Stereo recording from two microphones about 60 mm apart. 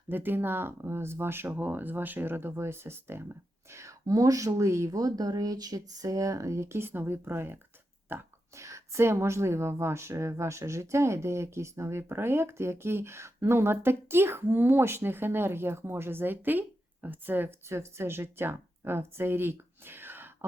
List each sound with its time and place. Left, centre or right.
0.1 s speech: right
3.7 s speech: right
4.9 s speech: right
8.5 s a woman's voice: right
17.7 s speech: right